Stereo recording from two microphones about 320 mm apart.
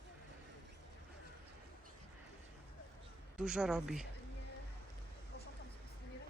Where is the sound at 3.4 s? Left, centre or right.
Centre.